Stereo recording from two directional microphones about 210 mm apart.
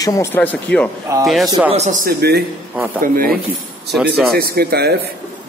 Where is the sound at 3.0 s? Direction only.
45° right (ahead or behind).